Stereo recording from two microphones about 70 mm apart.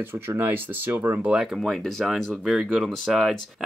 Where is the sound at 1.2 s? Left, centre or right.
Centre.